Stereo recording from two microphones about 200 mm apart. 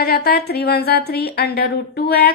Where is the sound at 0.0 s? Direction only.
50° left (ahead or behind).